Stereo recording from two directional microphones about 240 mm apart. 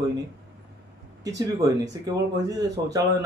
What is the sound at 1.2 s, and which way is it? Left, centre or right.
Speech, centre.